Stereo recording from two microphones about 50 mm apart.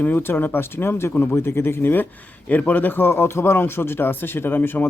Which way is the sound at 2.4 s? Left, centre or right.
Left.